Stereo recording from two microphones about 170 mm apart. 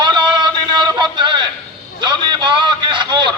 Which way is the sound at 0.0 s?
25° right (ahead or behind).